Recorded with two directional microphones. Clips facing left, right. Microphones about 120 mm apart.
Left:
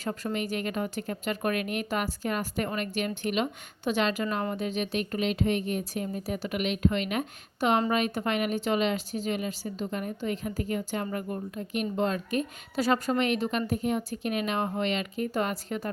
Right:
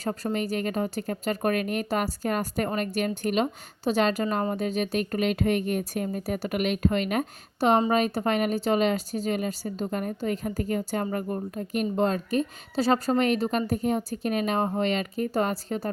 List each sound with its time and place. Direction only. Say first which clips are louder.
0.0 s a woman's voice: right 3 dB; 35° right (ahead or behind)